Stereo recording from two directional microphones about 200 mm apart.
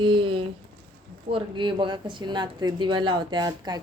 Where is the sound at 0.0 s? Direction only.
25° right (ahead or behind).